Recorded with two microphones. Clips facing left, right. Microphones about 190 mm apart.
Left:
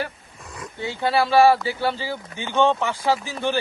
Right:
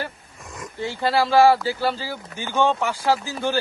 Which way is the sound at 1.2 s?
Centre (ahead or behind).